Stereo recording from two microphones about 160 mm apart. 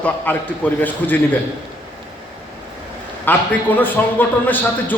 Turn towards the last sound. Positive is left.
turn(degrees=10)  # may be behind; listen again after turning